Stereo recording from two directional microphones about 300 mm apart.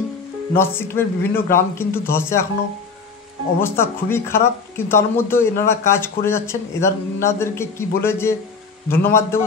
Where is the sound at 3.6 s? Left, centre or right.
Centre.